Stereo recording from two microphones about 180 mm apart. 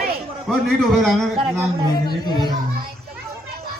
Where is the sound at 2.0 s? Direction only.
25° left (ahead or behind).